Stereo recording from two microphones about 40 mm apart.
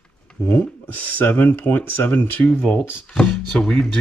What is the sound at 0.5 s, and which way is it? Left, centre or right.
Speech, left.